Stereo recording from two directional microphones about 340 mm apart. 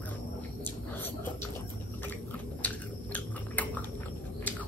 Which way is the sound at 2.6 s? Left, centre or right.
Centre.